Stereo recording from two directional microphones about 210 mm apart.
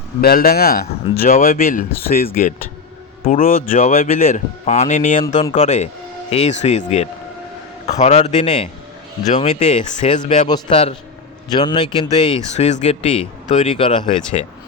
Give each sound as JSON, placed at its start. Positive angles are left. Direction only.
{"t": 0.2, "sound": "speech", "side_deg": 45}
{"t": 1.3, "sound": "speech", "side_deg": 35}